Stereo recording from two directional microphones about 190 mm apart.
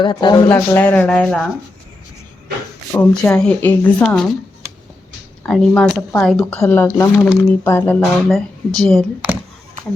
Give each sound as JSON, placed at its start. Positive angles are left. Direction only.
{"t": 0.0, "sound": "speech", "side_deg": 25}
{"t": 0.4, "sound": "speech", "side_deg": 10}
{"t": 2.9, "sound": "speech", "side_deg": 5}
{"t": 5.4, "sound": "speech", "side_deg": 5}